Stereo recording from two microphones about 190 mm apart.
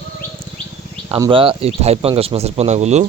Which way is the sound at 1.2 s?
25° right (ahead or behind).